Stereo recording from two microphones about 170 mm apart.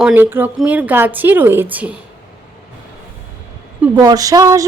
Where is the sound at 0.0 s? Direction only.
10° right (ahead or behind).